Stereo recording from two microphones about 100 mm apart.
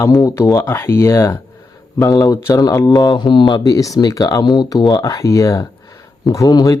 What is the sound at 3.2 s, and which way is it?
Speech, 50° left (ahead or behind).